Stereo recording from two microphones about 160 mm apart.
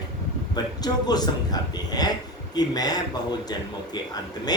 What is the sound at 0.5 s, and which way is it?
Speech, 25° left (ahead or behind).